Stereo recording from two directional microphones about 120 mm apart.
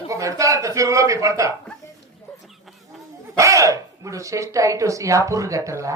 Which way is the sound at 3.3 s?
25° right (ahead or behind).